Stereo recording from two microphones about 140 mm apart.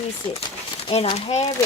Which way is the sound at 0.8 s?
40° left (ahead or behind).